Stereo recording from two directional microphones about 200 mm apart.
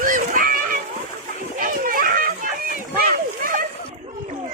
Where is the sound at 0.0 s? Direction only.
40° right (ahead or behind).